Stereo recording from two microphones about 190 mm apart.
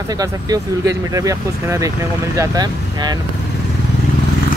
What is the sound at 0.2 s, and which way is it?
Speech, 20° right (ahead or behind).